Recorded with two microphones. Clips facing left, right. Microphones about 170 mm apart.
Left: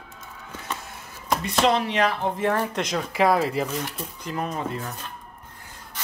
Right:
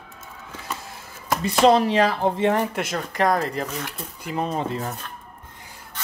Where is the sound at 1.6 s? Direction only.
35° right (ahead or behind).